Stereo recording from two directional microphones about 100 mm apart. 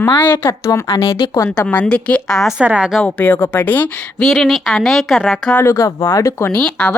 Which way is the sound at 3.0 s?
20° left (ahead or behind).